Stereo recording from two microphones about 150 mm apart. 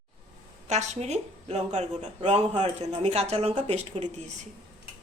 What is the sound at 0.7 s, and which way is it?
Speech, 50° right (ahead or behind).